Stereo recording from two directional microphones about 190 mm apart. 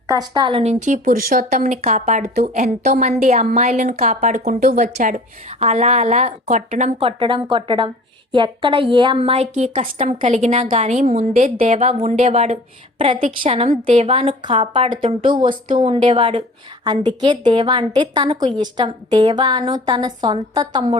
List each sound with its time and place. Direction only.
0.1 s a woman's voice: 20° right (ahead or behind)